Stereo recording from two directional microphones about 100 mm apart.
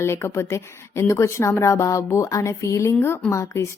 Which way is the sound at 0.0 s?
25° left (ahead or behind).